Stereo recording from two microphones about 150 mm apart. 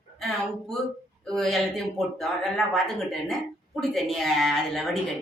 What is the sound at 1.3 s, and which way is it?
Speech, centre (ahead or behind).